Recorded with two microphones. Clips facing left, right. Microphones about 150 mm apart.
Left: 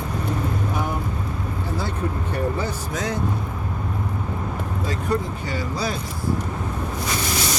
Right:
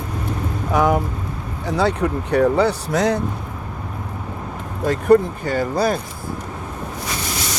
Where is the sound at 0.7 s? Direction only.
85° right.